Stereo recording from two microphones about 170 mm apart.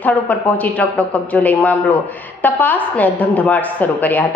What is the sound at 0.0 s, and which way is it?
A woman's voice, 10° left (ahead or behind).